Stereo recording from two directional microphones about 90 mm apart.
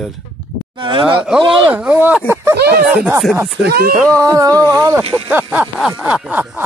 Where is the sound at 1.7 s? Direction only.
20° right (ahead or behind).